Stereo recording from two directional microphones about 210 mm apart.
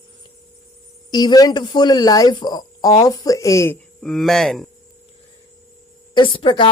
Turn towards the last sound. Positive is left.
turn(degrees=25)  # may be behind; listen again after turning